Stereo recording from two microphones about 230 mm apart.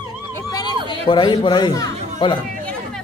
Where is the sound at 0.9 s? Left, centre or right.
Centre.